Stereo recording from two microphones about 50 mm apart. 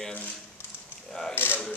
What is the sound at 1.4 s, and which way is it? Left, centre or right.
Speech, left.